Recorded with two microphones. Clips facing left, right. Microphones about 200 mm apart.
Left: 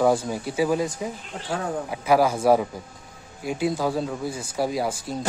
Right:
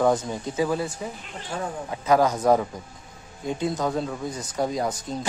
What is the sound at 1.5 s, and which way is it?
Speech, 65° left (ahead or behind).